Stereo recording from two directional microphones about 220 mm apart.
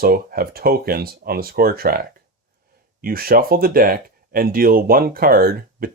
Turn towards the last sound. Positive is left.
turn(degrees=-40)  # may be behind; listen again after turning